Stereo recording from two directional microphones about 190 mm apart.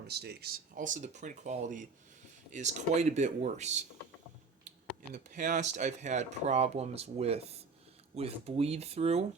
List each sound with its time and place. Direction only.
0.1 s speech: 60° right (ahead or behind); by 3.7 s 40° right (ahead or behind)
5.1 s speech: 40° right (ahead or behind)